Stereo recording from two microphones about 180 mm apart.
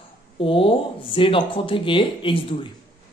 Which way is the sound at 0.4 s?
30° left (ahead or behind).